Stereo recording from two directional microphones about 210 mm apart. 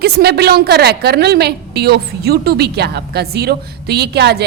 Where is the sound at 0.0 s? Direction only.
50° right (ahead or behind).